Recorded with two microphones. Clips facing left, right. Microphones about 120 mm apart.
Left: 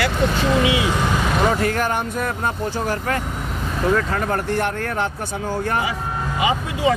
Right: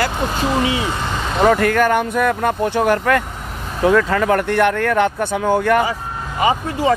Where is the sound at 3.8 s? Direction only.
90° right; by 5.8 s 70° right (ahead or behind).